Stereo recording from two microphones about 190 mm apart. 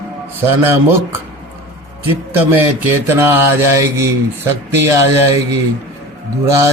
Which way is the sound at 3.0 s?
10° right (ahead or behind).